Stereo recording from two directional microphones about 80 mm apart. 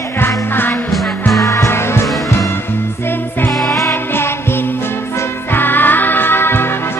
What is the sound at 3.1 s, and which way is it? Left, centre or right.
Music, left.